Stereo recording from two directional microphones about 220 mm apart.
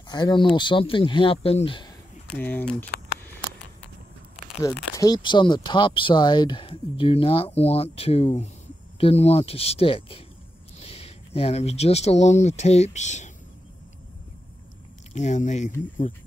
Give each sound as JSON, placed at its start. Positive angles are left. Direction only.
{"t": 0.1, "sound": "speech", "side_deg": 20}
{"t": 2.3, "sound": "speech", "side_deg": 10}
{"t": 4.9, "sound": "speech", "side_deg": 15}
{"t": 15.1, "sound": "speech", "side_deg": 30}